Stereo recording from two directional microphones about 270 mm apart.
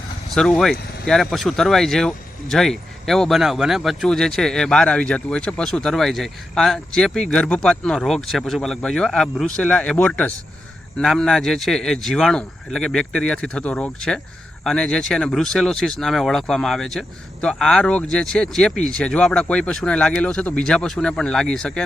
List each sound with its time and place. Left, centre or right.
0.3 s speech: centre